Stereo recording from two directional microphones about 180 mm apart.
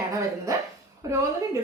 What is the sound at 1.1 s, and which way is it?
Speech, 15° right (ahead or behind).